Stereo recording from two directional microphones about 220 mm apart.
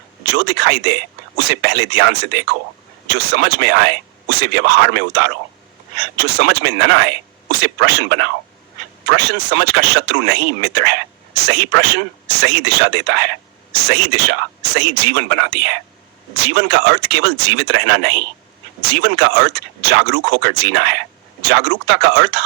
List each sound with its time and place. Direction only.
0.3 s speech: 50° right (ahead or behind)